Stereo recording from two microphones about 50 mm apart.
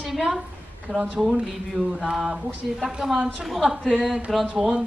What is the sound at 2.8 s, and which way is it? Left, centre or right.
Speech, centre.